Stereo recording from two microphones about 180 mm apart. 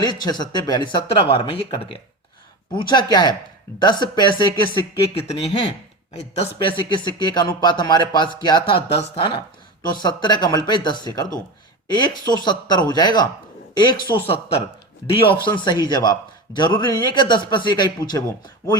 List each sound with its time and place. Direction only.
0.0 s a man's voice: 25° left (ahead or behind)